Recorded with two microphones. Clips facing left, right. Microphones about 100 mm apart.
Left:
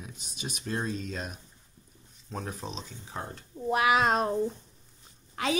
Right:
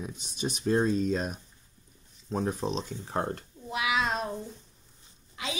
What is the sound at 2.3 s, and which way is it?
Speech, 25° right (ahead or behind).